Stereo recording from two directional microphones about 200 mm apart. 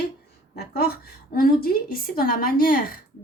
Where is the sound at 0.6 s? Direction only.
50° left (ahead or behind).